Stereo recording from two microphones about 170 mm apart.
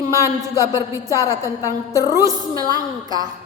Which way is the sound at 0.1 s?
20° right (ahead or behind).